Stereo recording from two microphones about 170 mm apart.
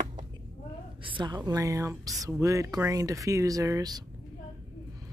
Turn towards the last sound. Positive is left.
turn(degrees=-20)  # may be behind; listen again after turning